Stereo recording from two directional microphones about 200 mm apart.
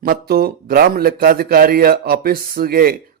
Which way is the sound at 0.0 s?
50° right (ahead or behind).